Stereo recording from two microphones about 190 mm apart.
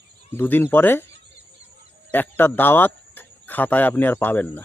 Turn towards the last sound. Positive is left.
turn(degrees=10)  # may be behind; listen again after turning